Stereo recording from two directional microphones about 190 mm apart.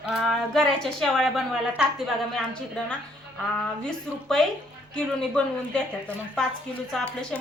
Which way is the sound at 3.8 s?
Centre (ahead or behind).